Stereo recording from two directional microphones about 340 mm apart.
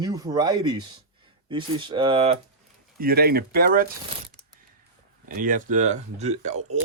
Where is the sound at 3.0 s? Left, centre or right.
Right.